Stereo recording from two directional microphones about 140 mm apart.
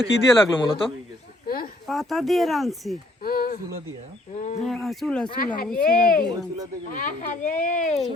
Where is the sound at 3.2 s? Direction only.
90° left.